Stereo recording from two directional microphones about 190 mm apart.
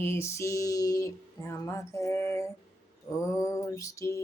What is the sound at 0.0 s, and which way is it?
Mantra, 15° left (ahead or behind).